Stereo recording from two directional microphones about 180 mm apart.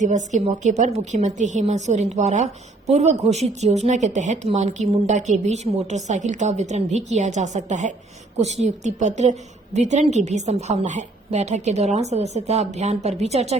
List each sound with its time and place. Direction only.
0.3 s a woman's voice: 40° right (ahead or behind)